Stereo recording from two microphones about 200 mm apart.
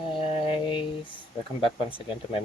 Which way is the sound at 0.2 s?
25° left (ahead or behind).